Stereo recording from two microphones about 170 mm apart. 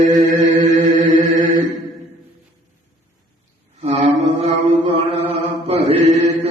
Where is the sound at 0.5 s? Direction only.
50° right (ahead or behind).